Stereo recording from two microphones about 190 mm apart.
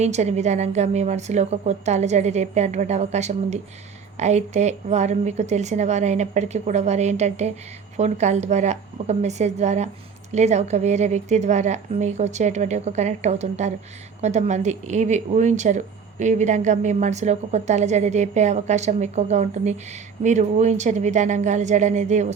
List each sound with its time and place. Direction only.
0.0 s speech: 35° right (ahead or behind)